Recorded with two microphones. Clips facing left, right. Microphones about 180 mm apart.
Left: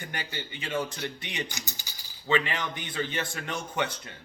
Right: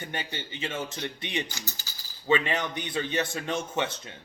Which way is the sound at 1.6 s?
15° left (ahead or behind).